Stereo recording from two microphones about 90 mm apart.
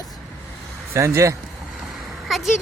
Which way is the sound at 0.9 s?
35° right (ahead or behind).